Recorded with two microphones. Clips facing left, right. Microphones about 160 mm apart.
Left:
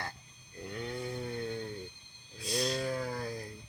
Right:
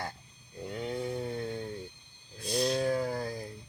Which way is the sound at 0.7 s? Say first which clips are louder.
Right 4 dB; 25° right (ahead or behind).